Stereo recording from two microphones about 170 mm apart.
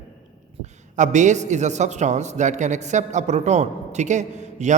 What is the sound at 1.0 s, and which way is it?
A man's voice, 45° right (ahead or behind).